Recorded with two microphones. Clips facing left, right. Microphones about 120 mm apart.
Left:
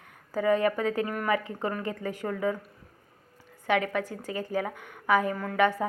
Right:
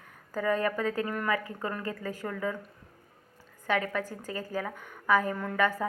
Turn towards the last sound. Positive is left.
turn(degrees=0)  # may be behind; listen again after turning